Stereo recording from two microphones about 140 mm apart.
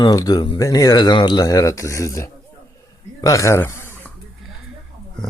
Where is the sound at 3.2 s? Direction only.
25° left (ahead or behind).